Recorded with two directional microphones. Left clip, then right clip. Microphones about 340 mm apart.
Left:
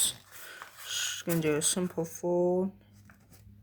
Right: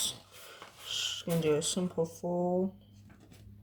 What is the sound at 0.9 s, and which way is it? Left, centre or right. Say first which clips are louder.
Speech: left 1 dB; left.